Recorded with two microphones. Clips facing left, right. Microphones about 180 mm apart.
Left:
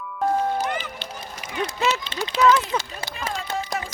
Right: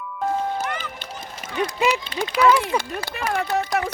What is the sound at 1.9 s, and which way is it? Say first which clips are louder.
Speech: right 2 dB; 15° right (ahead or behind).